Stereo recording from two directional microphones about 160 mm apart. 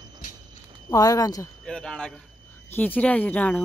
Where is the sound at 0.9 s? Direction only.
20° left (ahead or behind).